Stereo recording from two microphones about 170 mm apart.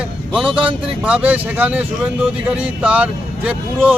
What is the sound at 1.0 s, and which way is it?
Speech, 5° right (ahead or behind).